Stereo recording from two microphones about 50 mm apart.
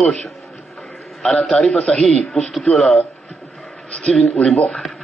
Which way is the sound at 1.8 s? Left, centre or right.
Centre.